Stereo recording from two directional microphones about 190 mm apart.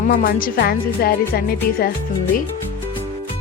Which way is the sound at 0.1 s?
50° left (ahead or behind).